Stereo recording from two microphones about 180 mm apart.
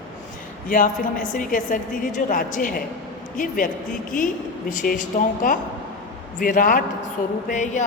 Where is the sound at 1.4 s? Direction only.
50° left (ahead or behind).